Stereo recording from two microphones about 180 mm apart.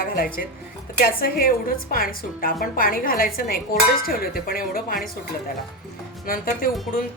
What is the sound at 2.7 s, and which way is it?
Dishes, 55° left (ahead or behind).